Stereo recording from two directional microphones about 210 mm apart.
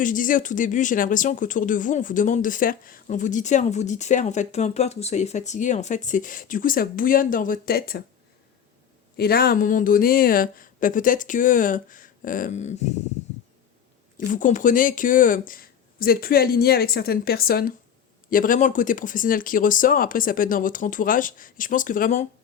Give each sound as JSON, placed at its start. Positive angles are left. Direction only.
{"t": 0.0, "sound": "speech", "side_deg": 40}
{"t": 9.1, "sound": "speech", "side_deg": 45}
{"t": 14.2, "sound": "speech", "side_deg": 40}